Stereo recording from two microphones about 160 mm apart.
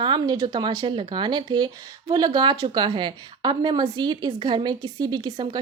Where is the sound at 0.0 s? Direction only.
30° right (ahead or behind).